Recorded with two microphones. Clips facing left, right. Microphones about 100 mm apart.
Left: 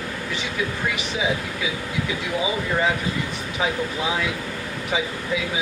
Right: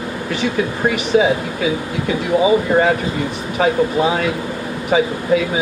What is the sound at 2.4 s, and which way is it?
Speech, 50° right (ahead or behind).